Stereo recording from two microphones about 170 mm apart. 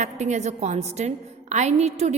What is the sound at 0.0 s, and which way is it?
A woman's voice, 45° right (ahead or behind).